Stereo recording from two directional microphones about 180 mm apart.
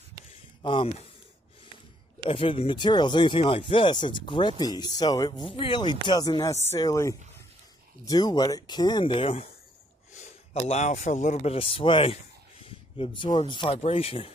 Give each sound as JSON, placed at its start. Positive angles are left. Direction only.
{"t": 0.6, "sound": "speech", "side_deg": 25}
{"t": 2.2, "sound": "a man's voice", "side_deg": 30}
{"t": 12.6, "sound": "a sound", "side_deg": 30}
{"t": 13.5, "sound": "speech", "side_deg": 30}